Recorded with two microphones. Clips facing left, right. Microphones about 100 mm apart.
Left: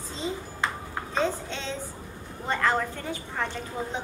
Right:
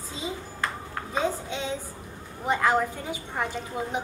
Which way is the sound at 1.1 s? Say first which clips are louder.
Even; 10° right (ahead or behind).